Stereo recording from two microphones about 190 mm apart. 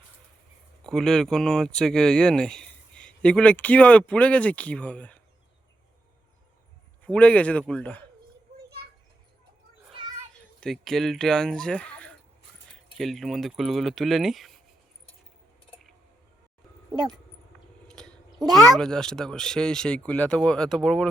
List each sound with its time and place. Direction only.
0.9 s speech: 5° left (ahead or behind)
7.0 s a man's voice: 5° left (ahead or behind)
10.3 s speech: 5° left (ahead or behind)
17.8 s a sound: 5° left (ahead or behind)
18.4 s speech: 20° right (ahead or behind)
18.7 s speech: 5° left (ahead or behind)